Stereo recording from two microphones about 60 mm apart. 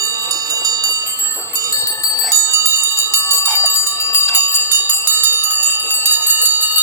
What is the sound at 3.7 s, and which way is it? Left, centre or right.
Bell, left.